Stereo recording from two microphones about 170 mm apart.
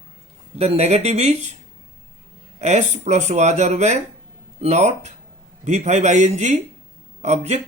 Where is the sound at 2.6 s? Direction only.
40° right (ahead or behind).